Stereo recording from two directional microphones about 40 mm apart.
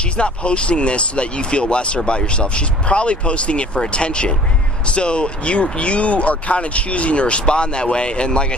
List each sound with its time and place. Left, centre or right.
0.2 s speech: left